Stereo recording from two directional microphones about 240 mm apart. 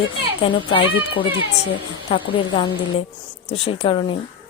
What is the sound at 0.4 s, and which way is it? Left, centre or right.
Speech, left.